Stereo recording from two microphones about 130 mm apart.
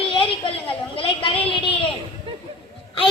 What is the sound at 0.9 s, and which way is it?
Speech, 45° left (ahead or behind).